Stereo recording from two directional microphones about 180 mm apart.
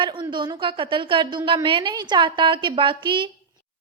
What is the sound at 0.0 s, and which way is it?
A woman's voice, 25° right (ahead or behind).